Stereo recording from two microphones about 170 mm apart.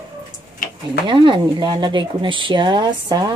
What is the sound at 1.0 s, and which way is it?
Speech, 30° right (ahead or behind).